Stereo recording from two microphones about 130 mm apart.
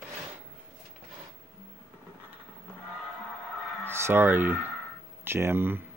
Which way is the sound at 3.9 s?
20° right (ahead or behind).